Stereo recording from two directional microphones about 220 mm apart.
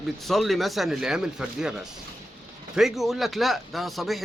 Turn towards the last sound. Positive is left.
turn(degrees=0)  # may be behind; listen again after turning